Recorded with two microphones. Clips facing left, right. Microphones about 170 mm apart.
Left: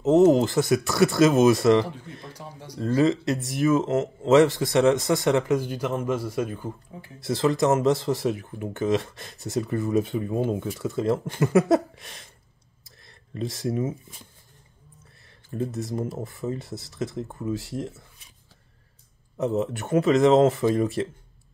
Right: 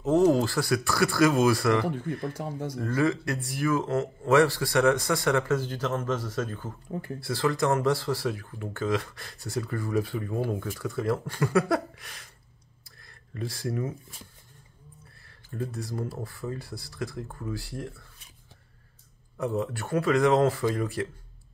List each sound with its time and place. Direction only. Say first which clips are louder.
0.0 s speech: left 4 dB; 20° left (ahead or behind)
2.2 s speech: right 8 dB; 50° right (ahead or behind)
2.8 s speech: left 5 dB; 25° left (ahead or behind)
15.5 s speech: left 5 dB; 20° left (ahead or behind)
19.3 s speech: left 4 dB; 20° left (ahead or behind)